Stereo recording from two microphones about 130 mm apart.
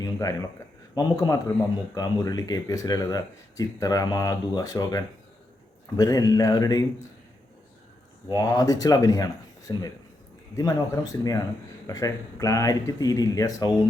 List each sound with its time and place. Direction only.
0.0 s speech: 25° left (ahead or behind)
8.3 s speech: 30° left (ahead or behind)